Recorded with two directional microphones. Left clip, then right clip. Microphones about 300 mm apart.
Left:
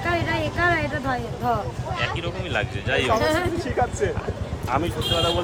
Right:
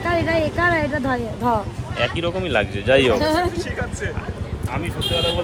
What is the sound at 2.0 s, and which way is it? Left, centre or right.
A man's voice, centre.